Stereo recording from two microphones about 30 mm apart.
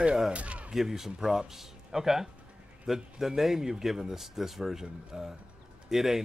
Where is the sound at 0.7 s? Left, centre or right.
Centre.